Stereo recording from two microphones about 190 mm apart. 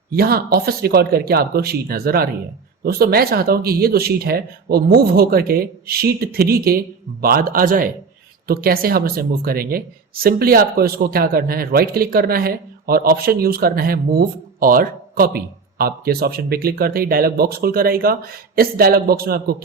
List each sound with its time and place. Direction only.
0.1 s speech: 55° right (ahead or behind)